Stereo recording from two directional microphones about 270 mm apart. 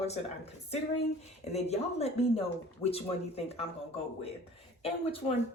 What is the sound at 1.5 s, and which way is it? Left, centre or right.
Speech, left.